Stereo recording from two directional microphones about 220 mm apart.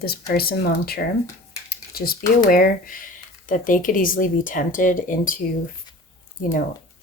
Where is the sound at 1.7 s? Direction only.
45° left (ahead or behind).